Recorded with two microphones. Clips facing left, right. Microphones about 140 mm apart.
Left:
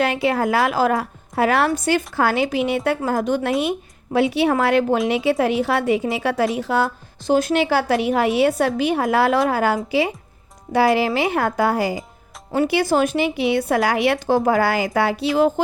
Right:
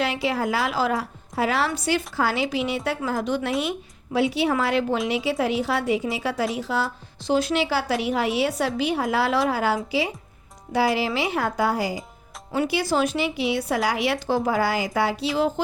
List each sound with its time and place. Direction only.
0.0 s a woman's voice: 55° left (ahead or behind)